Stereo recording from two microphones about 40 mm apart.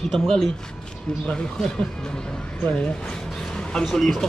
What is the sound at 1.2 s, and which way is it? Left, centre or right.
Speech, left.